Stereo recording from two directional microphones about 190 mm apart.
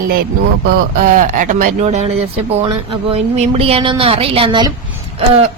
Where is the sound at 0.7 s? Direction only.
45° right (ahead or behind); by 4.7 s 25° right (ahead or behind).